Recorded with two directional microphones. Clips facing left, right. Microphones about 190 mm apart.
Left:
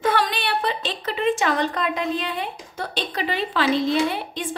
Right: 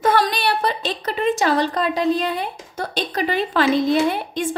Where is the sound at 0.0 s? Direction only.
40° right (ahead or behind).